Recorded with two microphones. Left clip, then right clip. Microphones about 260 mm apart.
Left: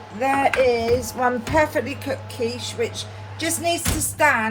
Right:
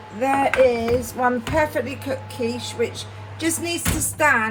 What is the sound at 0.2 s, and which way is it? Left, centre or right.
A woman's voice, left.